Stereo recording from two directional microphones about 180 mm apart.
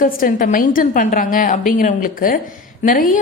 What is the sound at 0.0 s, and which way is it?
A woman's voice, 50° left (ahead or behind).